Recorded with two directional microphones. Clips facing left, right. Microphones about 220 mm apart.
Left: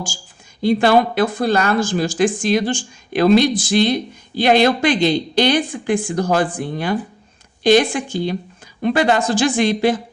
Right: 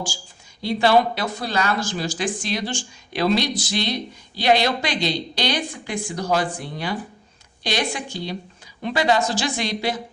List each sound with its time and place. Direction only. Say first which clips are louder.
0.6 s speech: left 4 dB; 50° left (ahead or behind)